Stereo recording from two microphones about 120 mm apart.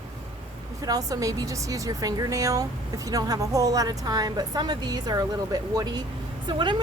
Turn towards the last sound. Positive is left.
turn(degrees=-40)  # may be behind; listen again after turning